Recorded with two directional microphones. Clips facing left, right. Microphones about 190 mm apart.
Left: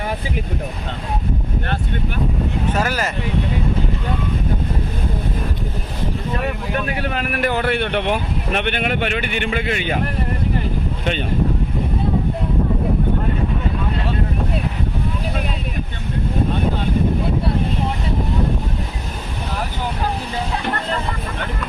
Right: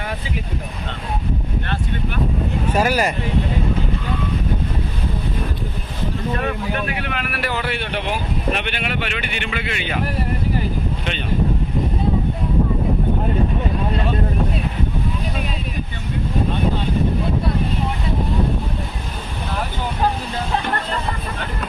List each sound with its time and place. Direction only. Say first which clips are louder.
2.7 s speech: right 6 dB; 10° right (ahead or behind)
6.8 s speech: left 3 dB; 40° left (ahead or behind)